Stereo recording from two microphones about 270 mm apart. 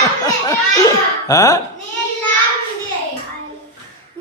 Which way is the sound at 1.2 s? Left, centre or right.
Centre.